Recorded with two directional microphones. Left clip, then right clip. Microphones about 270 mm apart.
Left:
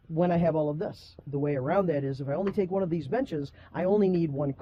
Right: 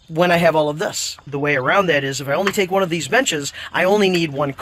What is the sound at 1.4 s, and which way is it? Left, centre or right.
A man's voice, centre.